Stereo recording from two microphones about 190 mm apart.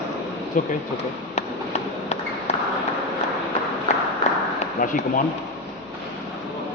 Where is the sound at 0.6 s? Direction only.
40° left (ahead or behind).